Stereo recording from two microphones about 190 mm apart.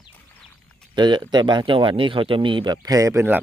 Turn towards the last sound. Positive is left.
turn(degrees=-15)  # may be behind; listen again after turning